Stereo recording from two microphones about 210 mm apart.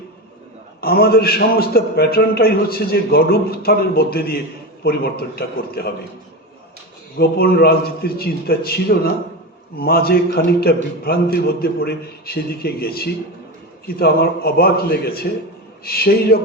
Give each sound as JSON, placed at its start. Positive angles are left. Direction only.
{"t": 0.8, "sound": "a man's voice", "side_deg": 45}
{"t": 7.2, "sound": "a man's voice", "side_deg": 45}